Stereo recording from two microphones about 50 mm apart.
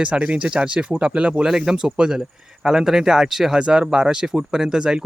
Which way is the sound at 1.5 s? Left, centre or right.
Centre.